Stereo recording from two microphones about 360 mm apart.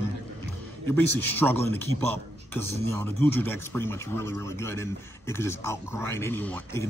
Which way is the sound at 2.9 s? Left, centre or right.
Centre.